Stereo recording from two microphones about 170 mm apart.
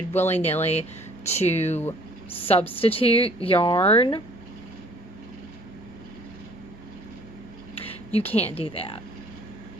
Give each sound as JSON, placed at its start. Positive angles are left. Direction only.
{"t": 0.1, "sound": "speech", "side_deg": 40}
{"t": 7.8, "sound": "a sound", "side_deg": 35}
{"t": 8.3, "sound": "speech", "side_deg": 35}